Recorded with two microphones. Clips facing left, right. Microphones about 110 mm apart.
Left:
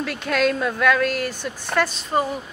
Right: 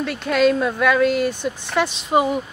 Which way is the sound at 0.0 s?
Centre (ahead or behind).